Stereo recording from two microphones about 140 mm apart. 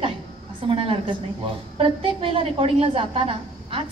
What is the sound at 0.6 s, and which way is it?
A woman's voice, 40° right (ahead or behind).